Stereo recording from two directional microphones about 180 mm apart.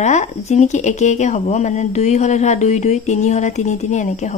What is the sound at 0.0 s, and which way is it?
Speech, 40° left (ahead or behind).